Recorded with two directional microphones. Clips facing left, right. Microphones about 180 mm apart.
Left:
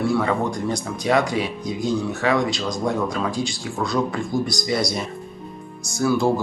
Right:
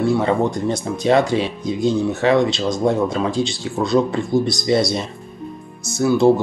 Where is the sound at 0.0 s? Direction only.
25° right (ahead or behind).